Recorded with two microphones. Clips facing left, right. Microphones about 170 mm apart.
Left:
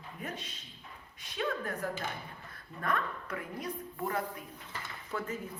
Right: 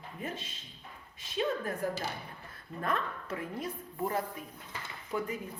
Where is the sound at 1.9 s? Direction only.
35° right (ahead or behind).